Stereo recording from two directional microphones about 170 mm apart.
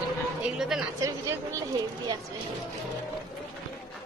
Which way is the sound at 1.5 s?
20° right (ahead or behind).